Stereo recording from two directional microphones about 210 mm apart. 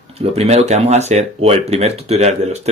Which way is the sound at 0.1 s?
30° right (ahead or behind).